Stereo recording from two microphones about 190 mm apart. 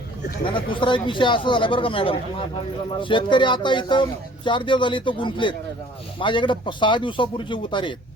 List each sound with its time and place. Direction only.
0.4 s speech: 25° left (ahead or behind)